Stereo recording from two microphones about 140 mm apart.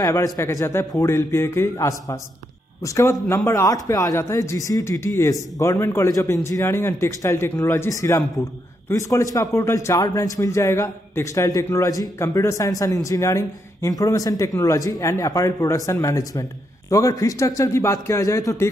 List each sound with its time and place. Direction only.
0.0 s a man's voice: 20° left (ahead or behind)